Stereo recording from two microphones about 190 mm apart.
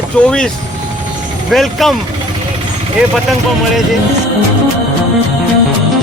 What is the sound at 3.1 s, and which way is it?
Speech, centre (ahead or behind).